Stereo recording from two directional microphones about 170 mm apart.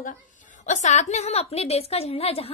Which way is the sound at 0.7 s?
45° left (ahead or behind).